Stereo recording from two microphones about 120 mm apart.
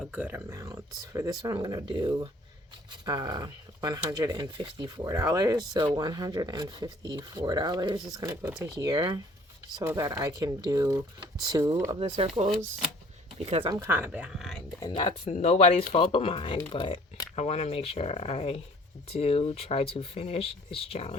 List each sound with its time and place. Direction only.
0.1 s speech: 15° right (ahead or behind)
0.5 s speech: 25° right (ahead or behind)
5.0 s speech: 30° right (ahead or behind)
11.9 s speech: 55° right (ahead or behind)
13.4 s speech: 55° right (ahead or behind)
13.8 s speech: 15° right (ahead or behind); by 14.6 s centre (ahead or behind)
14.8 s speech: 40° left (ahead or behind)
15.3 s speech: 65° left (ahead or behind)
15.9 s speech: 45° left (ahead or behind)
17.3 s speech: 60° left (ahead or behind)